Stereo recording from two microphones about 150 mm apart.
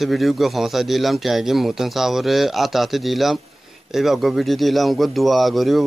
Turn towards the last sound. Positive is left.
turn(degrees=0)  # may be behind; listen again after turning